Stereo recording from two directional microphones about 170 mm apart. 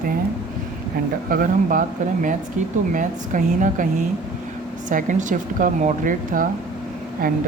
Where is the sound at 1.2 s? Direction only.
55° right (ahead or behind).